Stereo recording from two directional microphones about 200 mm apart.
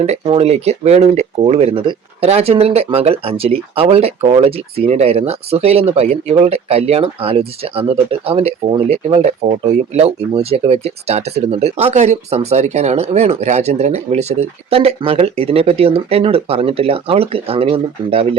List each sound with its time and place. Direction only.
0.0 s speech: 30° right (ahead or behind)